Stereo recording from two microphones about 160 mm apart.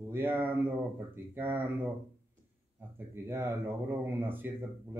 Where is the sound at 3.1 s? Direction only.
15° right (ahead or behind).